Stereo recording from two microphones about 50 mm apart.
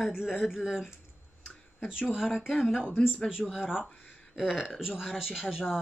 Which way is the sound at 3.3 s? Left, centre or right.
Centre.